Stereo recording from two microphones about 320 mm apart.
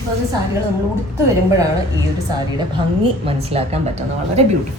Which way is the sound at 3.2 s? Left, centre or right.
Centre.